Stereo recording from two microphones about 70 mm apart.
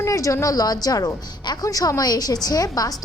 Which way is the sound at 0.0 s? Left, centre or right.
Left.